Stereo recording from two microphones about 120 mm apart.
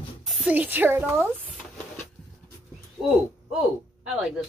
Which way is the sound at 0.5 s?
15° right (ahead or behind).